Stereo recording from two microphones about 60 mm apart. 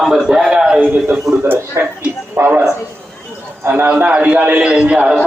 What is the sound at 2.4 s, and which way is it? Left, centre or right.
Speech, right.